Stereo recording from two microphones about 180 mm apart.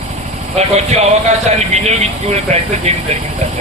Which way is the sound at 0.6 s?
35° right (ahead or behind).